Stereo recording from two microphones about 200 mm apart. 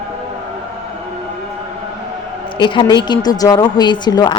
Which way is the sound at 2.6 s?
25° left (ahead or behind).